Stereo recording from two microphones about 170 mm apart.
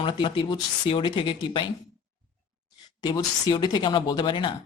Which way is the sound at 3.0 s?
25° left (ahead or behind).